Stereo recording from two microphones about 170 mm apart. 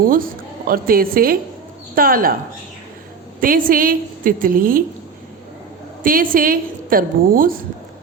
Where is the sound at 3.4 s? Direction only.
55° right (ahead or behind).